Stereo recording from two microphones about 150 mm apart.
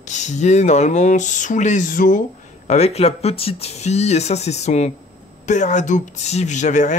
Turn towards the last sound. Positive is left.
turn(degrees=55)  # may be behind; listen again after turning